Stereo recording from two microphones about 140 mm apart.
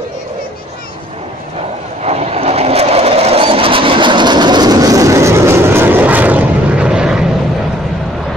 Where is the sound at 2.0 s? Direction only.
50° right (ahead or behind); by 7.2 s 5° right (ahead or behind).